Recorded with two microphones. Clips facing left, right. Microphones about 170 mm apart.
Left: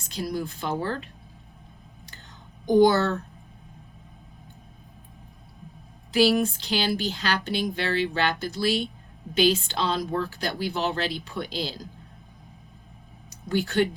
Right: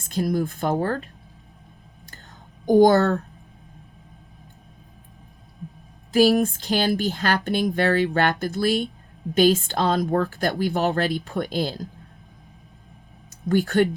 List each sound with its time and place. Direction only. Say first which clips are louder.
0.0 s speech: right 6 dB; 50° right (ahead or behind)
2.6 s speech: right 3 dB; 45° right (ahead or behind)
6.1 s speech: right 3 dB; 45° right (ahead or behind)
13.5 s speech: right 4 dB; 50° right (ahead or behind)